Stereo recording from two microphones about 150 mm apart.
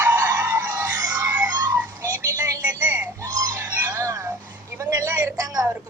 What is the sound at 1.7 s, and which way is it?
Music, 15° right (ahead or behind).